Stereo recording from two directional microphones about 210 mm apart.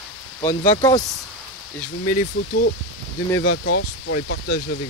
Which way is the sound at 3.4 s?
60° left (ahead or behind).